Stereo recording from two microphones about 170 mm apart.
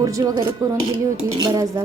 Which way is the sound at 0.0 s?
20° right (ahead or behind).